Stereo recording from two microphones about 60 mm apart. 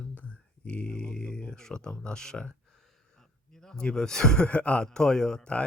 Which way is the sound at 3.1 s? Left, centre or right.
Centre.